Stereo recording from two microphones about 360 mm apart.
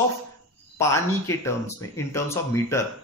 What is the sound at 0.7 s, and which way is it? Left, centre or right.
Speech, centre.